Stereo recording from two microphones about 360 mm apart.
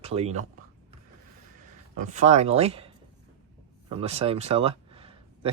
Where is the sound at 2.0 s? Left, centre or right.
Centre.